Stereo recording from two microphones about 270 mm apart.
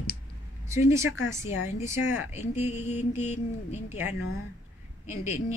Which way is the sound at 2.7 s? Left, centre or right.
Left.